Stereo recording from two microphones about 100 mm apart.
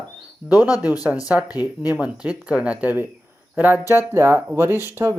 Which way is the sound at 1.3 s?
10° right (ahead or behind).